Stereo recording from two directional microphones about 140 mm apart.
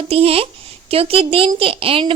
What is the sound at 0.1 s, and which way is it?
Speech, 45° right (ahead or behind).